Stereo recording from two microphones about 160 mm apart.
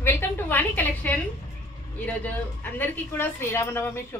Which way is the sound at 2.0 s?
10° left (ahead or behind).